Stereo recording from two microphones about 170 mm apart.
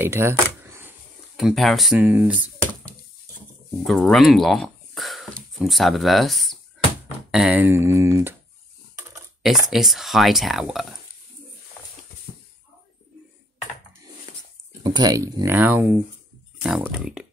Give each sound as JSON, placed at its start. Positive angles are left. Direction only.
{"t": 0.0, "sound": "camera", "side_deg": -15}
{"t": 1.3, "sound": "speech", "side_deg": 0}
{"t": 2.0, "sound": "speech", "side_deg": -10}
{"t": 3.8, "sound": "speech", "side_deg": 0}
{"t": 9.4, "sound": "speech", "side_deg": 0}
{"t": 14.8, "sound": "speech", "side_deg": -25}